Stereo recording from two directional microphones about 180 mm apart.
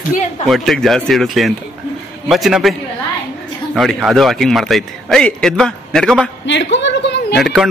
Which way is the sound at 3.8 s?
Centre (ahead or behind).